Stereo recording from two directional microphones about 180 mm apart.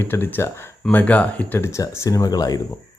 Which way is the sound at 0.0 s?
10° left (ahead or behind).